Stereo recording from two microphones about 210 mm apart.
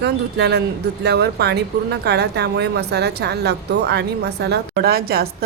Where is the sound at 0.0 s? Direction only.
55° right (ahead or behind).